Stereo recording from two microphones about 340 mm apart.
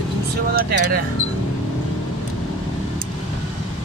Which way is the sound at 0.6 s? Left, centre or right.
Right.